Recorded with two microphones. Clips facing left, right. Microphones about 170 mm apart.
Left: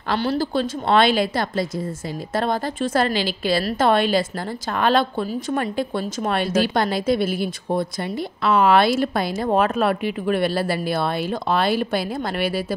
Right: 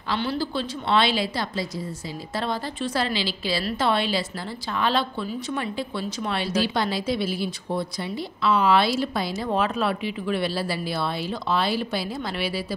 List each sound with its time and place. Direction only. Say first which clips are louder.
0.1 s speech: left 5 dB; 45° left (ahead or behind)